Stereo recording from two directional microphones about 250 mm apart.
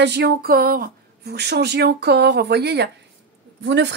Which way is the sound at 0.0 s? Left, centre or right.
Right.